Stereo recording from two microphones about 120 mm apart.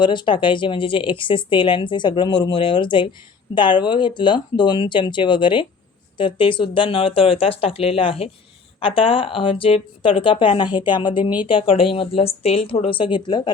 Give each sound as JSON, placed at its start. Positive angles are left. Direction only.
{"t": 0.0, "sound": "speech", "side_deg": 40}